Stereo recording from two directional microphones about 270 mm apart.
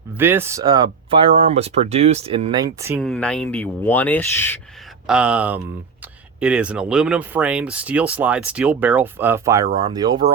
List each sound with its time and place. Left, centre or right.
0.2 s speech: centre
3.0 s speech: centre
5.0 s speech: centre